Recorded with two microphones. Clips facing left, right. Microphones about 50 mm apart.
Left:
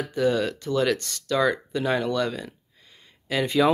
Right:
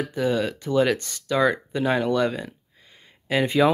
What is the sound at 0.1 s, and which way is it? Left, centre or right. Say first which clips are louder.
Speech: left 3 dB; centre.